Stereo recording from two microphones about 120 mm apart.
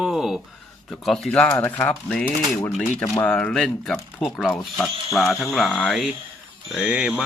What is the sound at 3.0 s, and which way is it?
Speech, 25° left (ahead or behind).